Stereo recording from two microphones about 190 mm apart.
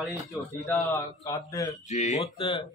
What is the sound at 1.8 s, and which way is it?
Speech, 40° left (ahead or behind).